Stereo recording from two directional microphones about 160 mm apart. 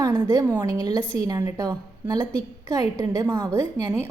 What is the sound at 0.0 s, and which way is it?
A woman's voice, 20° right (ahead or behind).